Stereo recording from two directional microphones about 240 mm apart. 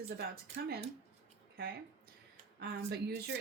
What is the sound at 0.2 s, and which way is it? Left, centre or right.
Speech, right.